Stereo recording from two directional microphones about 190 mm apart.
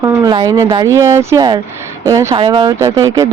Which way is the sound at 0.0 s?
20° right (ahead or behind).